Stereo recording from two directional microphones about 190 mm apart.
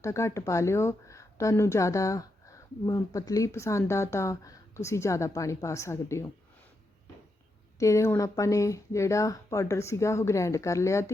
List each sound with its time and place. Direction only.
0.0 s speech: 15° left (ahead or behind)
7.8 s speech: 15° left (ahead or behind)